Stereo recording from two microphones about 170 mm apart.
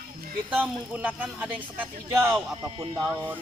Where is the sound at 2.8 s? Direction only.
25° right (ahead or behind).